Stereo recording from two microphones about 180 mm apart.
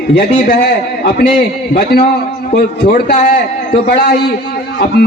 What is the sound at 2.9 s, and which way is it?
Speech, 45° left (ahead or behind).